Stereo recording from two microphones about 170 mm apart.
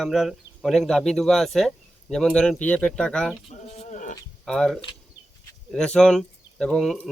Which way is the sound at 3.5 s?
40° left (ahead or behind).